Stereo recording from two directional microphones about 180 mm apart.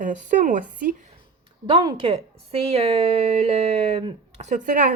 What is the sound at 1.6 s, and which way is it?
A woman's voice, 25° right (ahead or behind).